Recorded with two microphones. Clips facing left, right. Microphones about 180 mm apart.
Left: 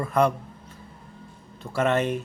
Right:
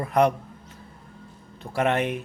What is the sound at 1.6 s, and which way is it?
Speech, 15° right (ahead or behind).